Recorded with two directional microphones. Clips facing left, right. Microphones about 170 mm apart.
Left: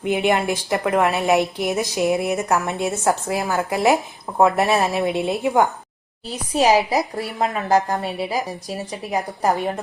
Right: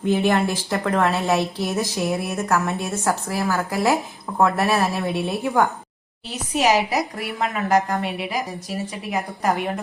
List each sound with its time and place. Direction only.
0.0 s a woman's voice: 15° left (ahead or behind)
6.5 s a woman's voice: 30° left (ahead or behind)